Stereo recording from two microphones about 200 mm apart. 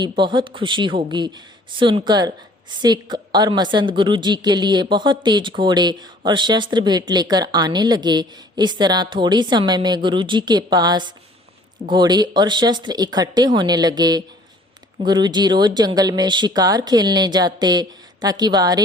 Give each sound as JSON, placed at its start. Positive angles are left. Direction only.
{"t": 0.0, "sound": "speech", "side_deg": -20}